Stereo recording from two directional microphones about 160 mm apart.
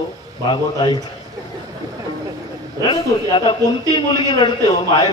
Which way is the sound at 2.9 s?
30° left (ahead or behind).